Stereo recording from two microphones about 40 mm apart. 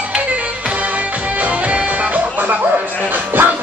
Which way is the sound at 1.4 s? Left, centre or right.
Right.